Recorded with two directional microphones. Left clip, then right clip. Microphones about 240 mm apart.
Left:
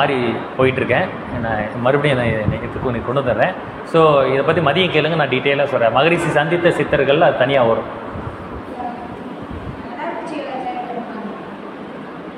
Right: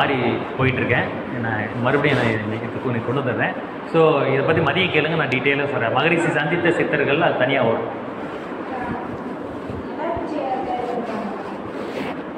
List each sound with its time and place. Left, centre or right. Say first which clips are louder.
0.6 s a man's voice: left 6 dB; left